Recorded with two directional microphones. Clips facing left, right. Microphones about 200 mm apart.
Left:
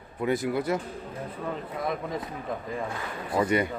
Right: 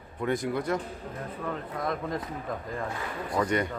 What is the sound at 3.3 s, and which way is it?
Speech, 5° left (ahead or behind).